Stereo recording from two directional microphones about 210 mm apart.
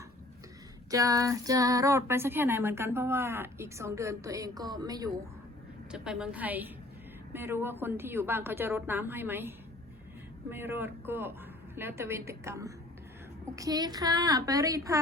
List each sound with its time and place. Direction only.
0.9 s speech: 15° right (ahead or behind)
5.9 s a woman's voice: 5° right (ahead or behind)